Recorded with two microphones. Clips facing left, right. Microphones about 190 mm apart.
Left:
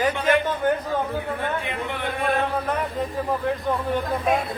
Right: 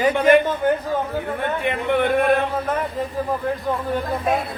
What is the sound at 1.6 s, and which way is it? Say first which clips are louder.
Speech: right 9 dB; 60° right (ahead or behind).